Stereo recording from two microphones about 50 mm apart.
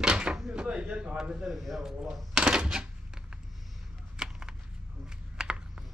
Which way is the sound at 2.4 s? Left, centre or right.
Centre.